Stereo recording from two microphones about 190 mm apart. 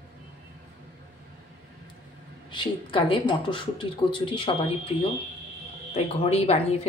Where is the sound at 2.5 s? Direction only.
25° left (ahead or behind).